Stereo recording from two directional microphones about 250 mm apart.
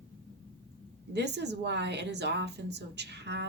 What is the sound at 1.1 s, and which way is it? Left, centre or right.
A woman's voice, right.